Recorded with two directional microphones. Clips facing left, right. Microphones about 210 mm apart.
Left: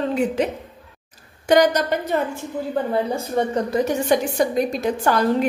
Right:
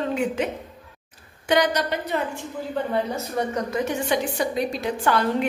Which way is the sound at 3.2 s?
30° left (ahead or behind).